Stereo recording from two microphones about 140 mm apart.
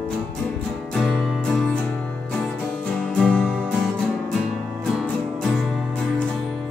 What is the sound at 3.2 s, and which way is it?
Music, 10° left (ahead or behind).